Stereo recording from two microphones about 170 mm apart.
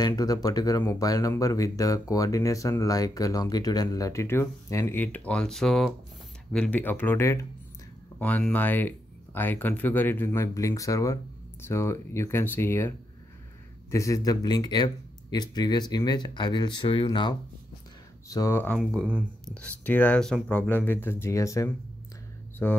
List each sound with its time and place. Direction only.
0.0 s speech: 20° left (ahead or behind)
18.8 s speech: 5° right (ahead or behind)
19.5 s speech: 10° left (ahead or behind)